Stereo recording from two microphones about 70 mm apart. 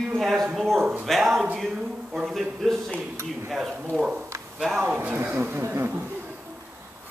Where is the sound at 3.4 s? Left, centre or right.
Centre.